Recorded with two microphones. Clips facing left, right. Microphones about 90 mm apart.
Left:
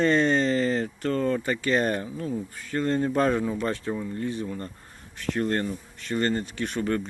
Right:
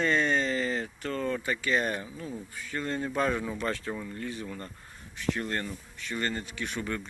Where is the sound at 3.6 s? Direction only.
25° left (ahead or behind).